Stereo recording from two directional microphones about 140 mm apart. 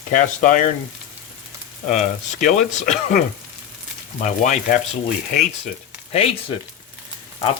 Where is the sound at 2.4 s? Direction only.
60° left (ahead or behind).